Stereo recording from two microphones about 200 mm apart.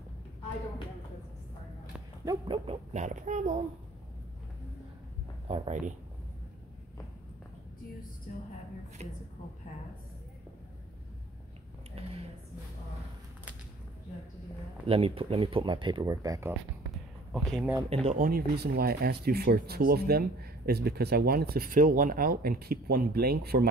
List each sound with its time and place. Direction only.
2.2 s speech: 25° right (ahead or behind)
5.5 s speech: 35° right (ahead or behind)
8.3 s a sound: 45° left (ahead or behind)
9.0 s speech: 35° right (ahead or behind)
14.9 s speech: 30° right (ahead or behind)
17.3 s speech: centre (ahead or behind)
18.0 s speech: 45° right (ahead or behind)